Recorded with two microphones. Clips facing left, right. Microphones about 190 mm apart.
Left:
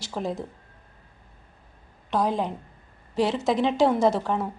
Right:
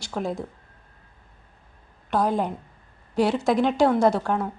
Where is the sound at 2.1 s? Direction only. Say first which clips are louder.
Right 2 dB; centre (ahead or behind).